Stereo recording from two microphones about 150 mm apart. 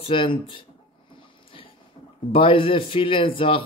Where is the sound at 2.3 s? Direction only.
35° left (ahead or behind).